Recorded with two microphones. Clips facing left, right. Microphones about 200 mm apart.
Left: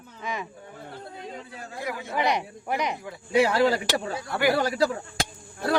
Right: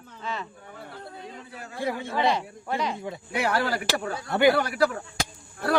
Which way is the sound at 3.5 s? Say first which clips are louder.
Left 4 dB; 20° left (ahead or behind).